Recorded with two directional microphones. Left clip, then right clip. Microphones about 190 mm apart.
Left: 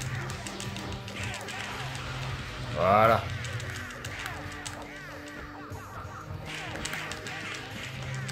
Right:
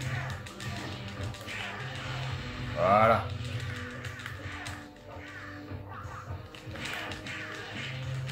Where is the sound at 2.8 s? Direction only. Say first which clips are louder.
Left 1 dB; 55° left (ahead or behind).